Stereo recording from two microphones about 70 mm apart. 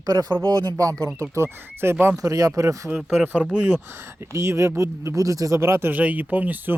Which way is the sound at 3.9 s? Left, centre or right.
Right.